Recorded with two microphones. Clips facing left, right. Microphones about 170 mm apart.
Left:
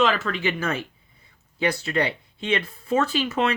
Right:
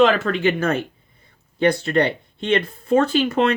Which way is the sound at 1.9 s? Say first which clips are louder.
Right 4 dB; 45° right (ahead or behind).